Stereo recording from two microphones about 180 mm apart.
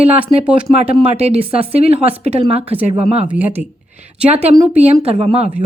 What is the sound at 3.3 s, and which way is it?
Speech, 10° right (ahead or behind).